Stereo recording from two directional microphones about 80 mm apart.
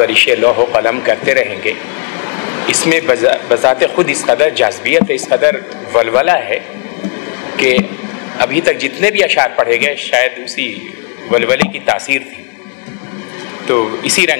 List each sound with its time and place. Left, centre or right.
0.0 s a man's voice: left
13.7 s a man's voice: left